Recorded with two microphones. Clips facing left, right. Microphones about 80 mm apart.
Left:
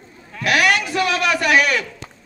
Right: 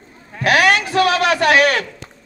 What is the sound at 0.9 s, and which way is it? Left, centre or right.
Speech, right.